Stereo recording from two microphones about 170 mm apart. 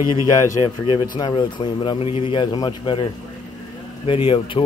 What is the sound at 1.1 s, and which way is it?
Speech, 25° left (ahead or behind).